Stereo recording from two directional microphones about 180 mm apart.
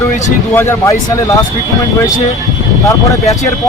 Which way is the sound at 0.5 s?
15° left (ahead or behind).